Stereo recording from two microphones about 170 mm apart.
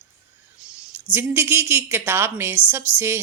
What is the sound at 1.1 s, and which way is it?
A woman's voice, 15° right (ahead or behind).